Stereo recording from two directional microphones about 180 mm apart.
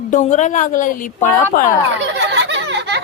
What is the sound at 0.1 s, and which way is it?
Speech, 45° left (ahead or behind).